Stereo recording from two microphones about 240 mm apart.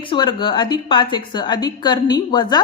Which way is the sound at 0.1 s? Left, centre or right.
Centre.